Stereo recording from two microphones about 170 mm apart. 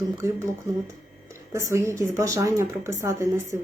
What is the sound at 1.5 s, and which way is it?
Speech, 15° right (ahead or behind).